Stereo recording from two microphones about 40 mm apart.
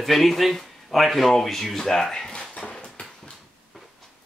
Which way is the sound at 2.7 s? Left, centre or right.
Left.